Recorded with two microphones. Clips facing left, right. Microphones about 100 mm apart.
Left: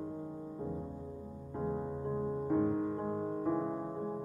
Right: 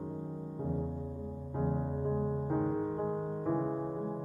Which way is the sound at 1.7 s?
20° right (ahead or behind).